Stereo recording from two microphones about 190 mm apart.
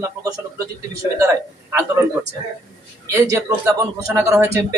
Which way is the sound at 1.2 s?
15° right (ahead or behind).